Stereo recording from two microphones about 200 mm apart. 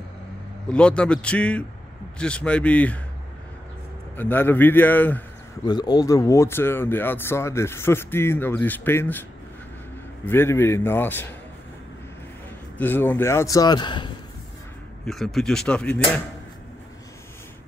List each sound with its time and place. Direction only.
0.7 s a man's voice: 5° left (ahead or behind)
4.2 s speech: 10° left (ahead or behind)
5.7 s speech: 20° left (ahead or behind)
10.2 s speech: 10° left (ahead or behind)
12.7 s speech: 10° left (ahead or behind)
15.0 s a man's voice: centre (ahead or behind)